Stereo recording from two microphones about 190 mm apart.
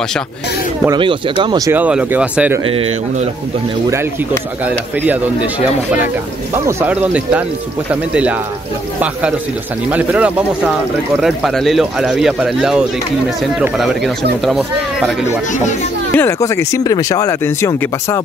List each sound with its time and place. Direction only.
0.8 s speech: 25° right (ahead or behind)
1.7 s speech: 5° right (ahead or behind)
2.7 s a man's voice: 30° right (ahead or behind)
6.6 s speech: 10° right (ahead or behind)
9.8 s speech: 5° right (ahead or behind)
16.2 s speech: 15° left (ahead or behind)